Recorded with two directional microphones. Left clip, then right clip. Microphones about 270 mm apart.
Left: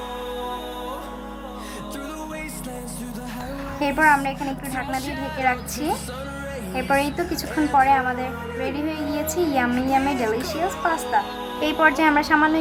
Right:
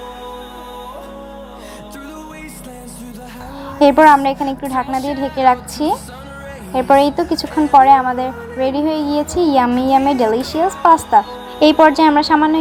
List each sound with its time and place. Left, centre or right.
3.8 s a child's voice: centre
4.9 s a woman's voice: centre
5.8 s a child's voice: centre